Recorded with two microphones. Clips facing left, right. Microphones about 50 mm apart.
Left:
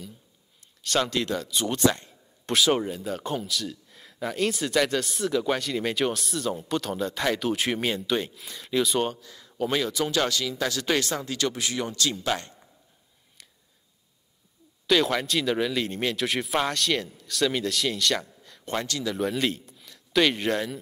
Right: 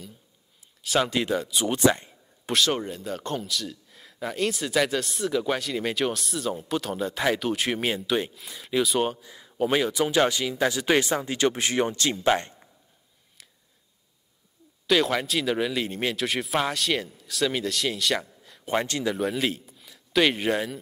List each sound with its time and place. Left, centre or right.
0.8 s speech: centre
1.9 s a sound: centre
2.5 s speech: centre; by 12.5 s right
14.9 s speech: centre
18.7 s speech: right
19.1 s a man's voice: centre